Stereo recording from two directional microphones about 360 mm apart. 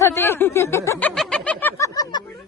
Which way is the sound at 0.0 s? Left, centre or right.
Centre.